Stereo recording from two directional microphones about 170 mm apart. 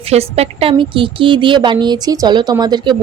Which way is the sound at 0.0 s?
35° right (ahead or behind).